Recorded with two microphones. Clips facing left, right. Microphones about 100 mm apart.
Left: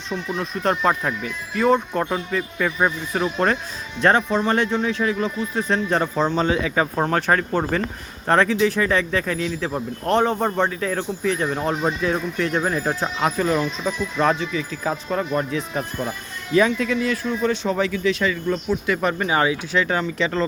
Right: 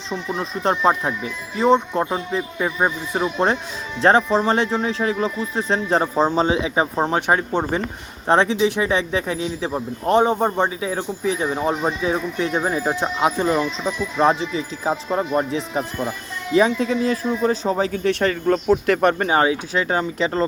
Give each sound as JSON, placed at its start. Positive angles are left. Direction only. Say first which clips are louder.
{"t": 0.1, "sound": "speech", "louder": "right 1 dB", "side_deg": -30}
{"t": 13.3, "sound": "speech", "louder": "right 1 dB", "side_deg": -25}
{"t": 18.0, "sound": "speech", "louder": "right 2 dB", "side_deg": -55}
{"t": 19.3, "sound": "speech", "louder": "right 2 dB", "side_deg": -35}